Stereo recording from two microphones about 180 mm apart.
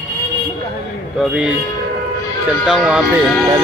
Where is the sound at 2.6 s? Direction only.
5° right (ahead or behind).